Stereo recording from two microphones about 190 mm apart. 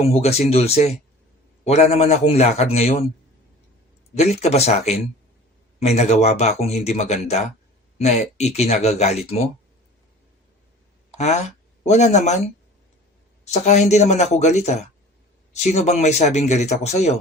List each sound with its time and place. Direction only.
0.0 s speech: 35° left (ahead or behind)
4.1 s speech: 35° left (ahead or behind)
11.2 s speech: 35° left (ahead or behind)